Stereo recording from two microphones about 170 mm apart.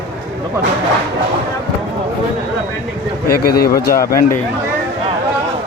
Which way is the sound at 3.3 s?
65° left (ahead or behind).